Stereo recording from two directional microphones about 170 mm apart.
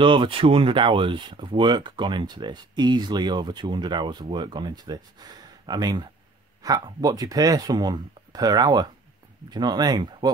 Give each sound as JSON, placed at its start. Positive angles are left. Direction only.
{"t": 0.0, "sound": "speech", "side_deg": -30}